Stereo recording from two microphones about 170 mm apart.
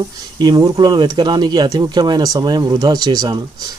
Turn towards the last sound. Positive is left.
turn(degrees=-25)  # may be behind; listen again after turning